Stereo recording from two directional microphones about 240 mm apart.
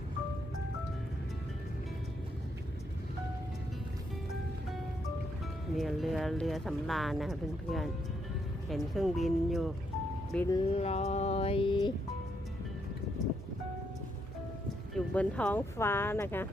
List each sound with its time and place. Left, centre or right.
5.7 s speech: centre
10.3 s speech: centre
10.7 s a sound: left
14.9 s speech: centre